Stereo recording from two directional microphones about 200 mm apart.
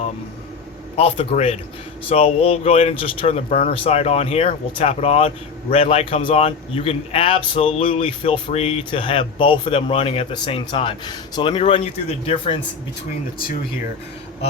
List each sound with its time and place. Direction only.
0.9 s a man's voice: 30° left (ahead or behind)